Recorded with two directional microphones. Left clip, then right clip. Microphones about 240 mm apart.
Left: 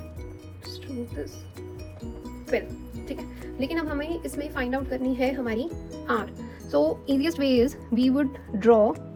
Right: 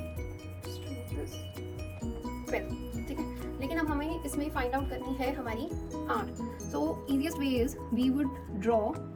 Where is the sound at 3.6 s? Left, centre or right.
Left.